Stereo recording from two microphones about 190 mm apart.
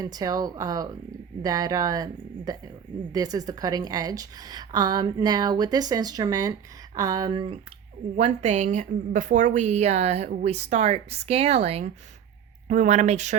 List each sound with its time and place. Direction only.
0.0 s a woman's voice: 20° right (ahead or behind)
8.1 s a woman's voice: 35° right (ahead or behind)